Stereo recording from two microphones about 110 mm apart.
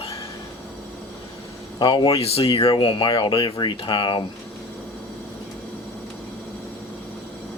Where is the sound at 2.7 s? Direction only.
50° left (ahead or behind).